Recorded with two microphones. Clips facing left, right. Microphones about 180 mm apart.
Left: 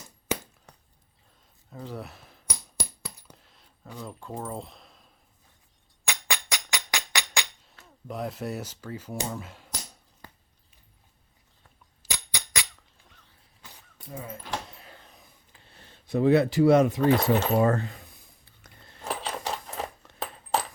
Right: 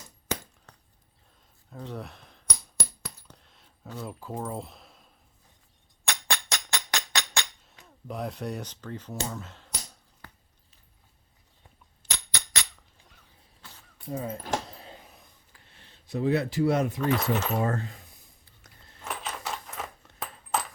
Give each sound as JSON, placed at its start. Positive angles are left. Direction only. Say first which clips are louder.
{"t": 0.3, "sound": "a sound", "louder": "left 2 dB", "side_deg": 10}
{"t": 1.7, "sound": "coin", "louder": "even", "side_deg": 0}
{"t": 4.0, "sound": "speech", "louder": "right 1 dB", "side_deg": -5}
{"t": 6.1, "sound": "music", "louder": "even", "side_deg": 5}
{"t": 7.9, "sound": "speech", "louder": "left 1 dB", "side_deg": 0}
{"t": 12.0, "sound": "a sound", "louder": "left 1 dB", "side_deg": 10}
{"t": 14.1, "sound": "speech", "louder": "right 6 dB", "side_deg": -30}
{"t": 14.9, "sound": "a sound", "louder": "right 2 dB", "side_deg": -5}
{"t": 15.7, "sound": "speech", "louder": "left 6 dB", "side_deg": 55}
{"t": 17.0, "sound": "speech", "louder": "left 5 dB", "side_deg": 35}
{"t": 17.6, "sound": "speech", "louder": "left 5 dB", "side_deg": 70}
{"t": 19.0, "sound": "a sound", "louder": "left 4 dB", "side_deg": 35}